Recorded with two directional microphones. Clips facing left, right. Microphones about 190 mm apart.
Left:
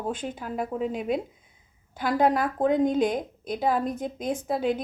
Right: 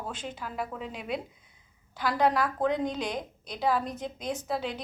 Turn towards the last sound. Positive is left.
turn(degrees=50)  # may be behind; listen again after turning